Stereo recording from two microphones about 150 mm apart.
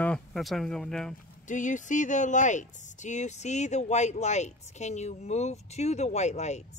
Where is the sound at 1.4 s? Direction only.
55° left (ahead or behind).